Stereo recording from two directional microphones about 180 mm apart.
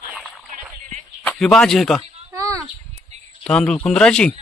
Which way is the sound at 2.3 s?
20° right (ahead or behind).